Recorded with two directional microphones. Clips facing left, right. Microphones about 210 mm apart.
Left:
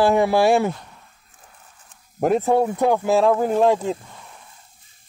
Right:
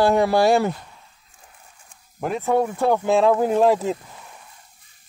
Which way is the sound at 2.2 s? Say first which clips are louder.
Left 7 dB; 45° left (ahead or behind).